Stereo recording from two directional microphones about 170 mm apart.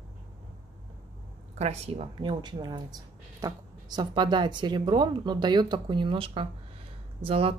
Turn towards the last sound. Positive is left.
turn(degrees=-35)  # may be behind; listen again after turning